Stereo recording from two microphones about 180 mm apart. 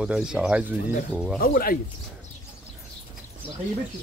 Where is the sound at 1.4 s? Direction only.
55° left (ahead or behind).